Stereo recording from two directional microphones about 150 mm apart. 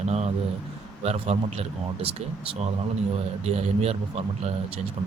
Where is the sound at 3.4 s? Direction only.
45° right (ahead or behind).